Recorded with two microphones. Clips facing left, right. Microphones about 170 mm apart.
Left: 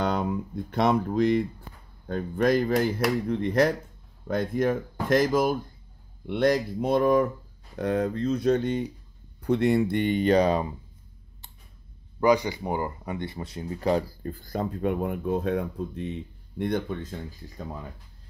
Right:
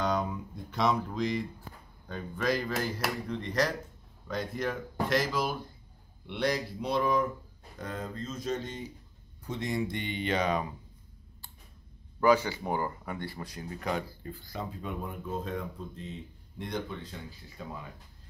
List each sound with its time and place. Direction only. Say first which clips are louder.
0.0 s a sound: left 4 dB; 60° left (ahead or behind)
2.0 s speech: left 7 dB; 50° left (ahead or behind)
7.8 s speech: left 12 dB; 70° left (ahead or behind); by 10.7 s 35° left (ahead or behind)
12.2 s speech: left 3 dB; 15° left (ahead or behind); by 17.6 s 45° left (ahead or behind)